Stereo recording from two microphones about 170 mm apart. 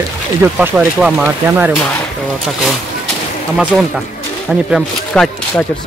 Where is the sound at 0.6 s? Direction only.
5° right (ahead or behind).